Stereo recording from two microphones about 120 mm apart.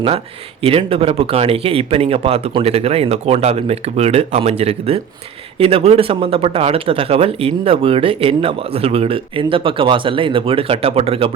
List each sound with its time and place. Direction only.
0.6 s speech: 55° right (ahead or behind)